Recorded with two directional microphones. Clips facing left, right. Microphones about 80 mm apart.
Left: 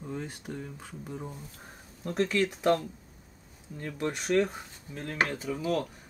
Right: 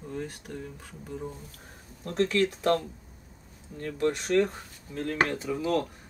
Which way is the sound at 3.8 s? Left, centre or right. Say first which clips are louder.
Right 5 dB; centre.